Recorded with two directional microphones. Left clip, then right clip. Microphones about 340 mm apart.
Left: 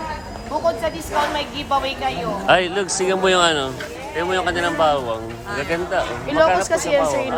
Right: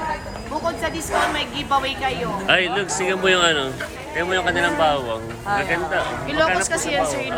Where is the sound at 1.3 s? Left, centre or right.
Centre.